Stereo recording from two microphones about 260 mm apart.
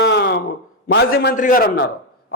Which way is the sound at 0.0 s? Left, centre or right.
Left.